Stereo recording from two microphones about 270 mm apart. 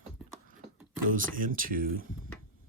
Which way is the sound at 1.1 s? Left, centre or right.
Right.